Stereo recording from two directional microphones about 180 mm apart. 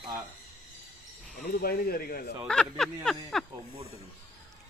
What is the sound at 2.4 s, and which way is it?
Speech, 5° left (ahead or behind).